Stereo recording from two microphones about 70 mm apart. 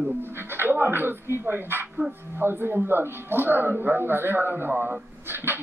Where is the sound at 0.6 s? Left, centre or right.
Right.